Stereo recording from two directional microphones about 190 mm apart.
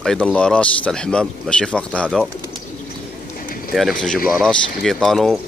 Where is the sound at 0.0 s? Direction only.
5° left (ahead or behind).